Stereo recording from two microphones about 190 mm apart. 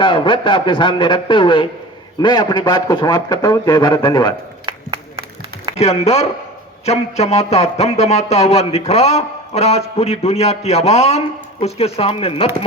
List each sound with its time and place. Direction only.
0.0 s a man's voice: 25° left (ahead or behind)
4.6 s a sound: 25° right (ahead or behind)
5.7 s speech: 35° left (ahead or behind)